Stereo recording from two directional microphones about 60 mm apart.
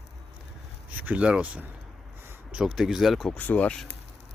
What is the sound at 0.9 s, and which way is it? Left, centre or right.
Speech, right.